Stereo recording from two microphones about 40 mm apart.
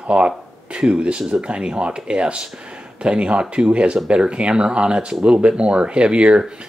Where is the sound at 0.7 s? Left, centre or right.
Right.